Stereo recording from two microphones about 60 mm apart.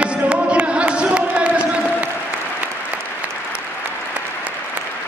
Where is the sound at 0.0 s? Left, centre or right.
Centre.